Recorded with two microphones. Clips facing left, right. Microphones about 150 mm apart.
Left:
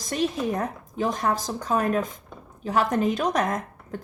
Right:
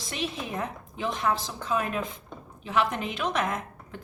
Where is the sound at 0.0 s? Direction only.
45° left (ahead or behind).